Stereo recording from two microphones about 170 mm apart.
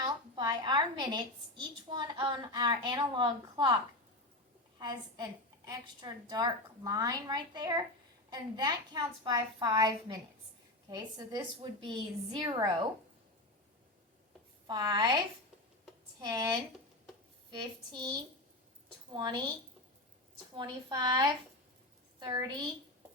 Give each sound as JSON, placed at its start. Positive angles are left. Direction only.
{"t": 0.0, "sound": "a woman's voice", "side_deg": -25}
{"t": 4.8, "sound": "a woman's voice", "side_deg": -25}
{"t": 14.7, "sound": "a woman's voice", "side_deg": -25}
{"t": 16.3, "sound": "a woman's voice", "side_deg": -20}
{"t": 19.1, "sound": "a woman's voice", "side_deg": -25}
{"t": 20.6, "sound": "a woman's voice", "side_deg": -25}